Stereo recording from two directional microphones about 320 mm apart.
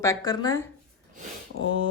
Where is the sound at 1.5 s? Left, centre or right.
Right.